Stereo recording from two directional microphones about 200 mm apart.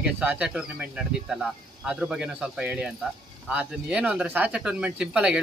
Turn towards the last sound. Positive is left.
turn(degrees=-5)  # may be behind; listen again after turning